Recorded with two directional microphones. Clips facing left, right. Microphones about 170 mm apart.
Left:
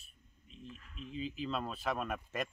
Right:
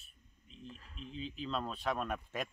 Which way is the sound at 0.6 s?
35° right (ahead or behind).